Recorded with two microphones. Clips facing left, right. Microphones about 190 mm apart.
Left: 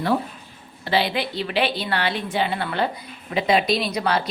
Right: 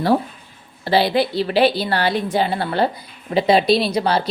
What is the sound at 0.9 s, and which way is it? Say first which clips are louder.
A woman's voice: right 6 dB; 35° right (ahead or behind).